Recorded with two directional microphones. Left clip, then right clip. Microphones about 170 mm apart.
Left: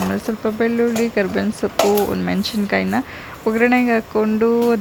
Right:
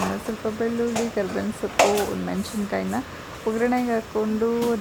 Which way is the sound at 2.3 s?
25° left (ahead or behind).